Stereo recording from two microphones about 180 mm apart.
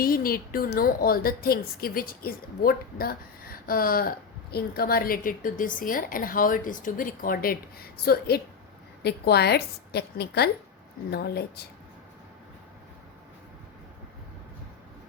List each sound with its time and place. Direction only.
0.0 s a woman's voice: 55° left (ahead or behind)